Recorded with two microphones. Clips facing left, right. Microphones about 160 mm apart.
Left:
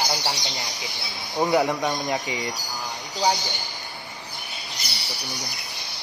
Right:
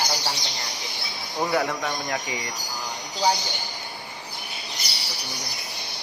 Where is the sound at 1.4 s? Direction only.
15° left (ahead or behind).